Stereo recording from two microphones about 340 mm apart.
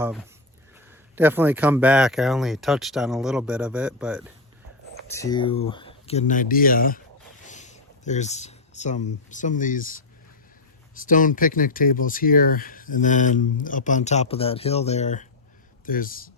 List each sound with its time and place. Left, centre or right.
0.0 s speech: centre
5.1 s speech: centre